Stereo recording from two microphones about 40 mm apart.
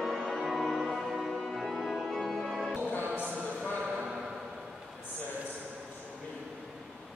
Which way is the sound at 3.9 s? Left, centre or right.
Centre.